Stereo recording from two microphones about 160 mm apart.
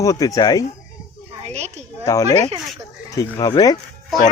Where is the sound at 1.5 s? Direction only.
45° right (ahead or behind).